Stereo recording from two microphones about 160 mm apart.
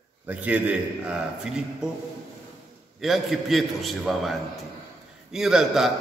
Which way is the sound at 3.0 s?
Centre (ahead or behind).